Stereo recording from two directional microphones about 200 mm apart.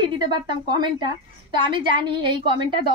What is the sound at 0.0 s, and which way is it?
A woman's voice, 25° right (ahead or behind).